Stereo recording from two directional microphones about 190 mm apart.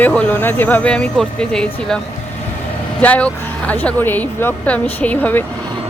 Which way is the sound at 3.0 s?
10° left (ahead or behind).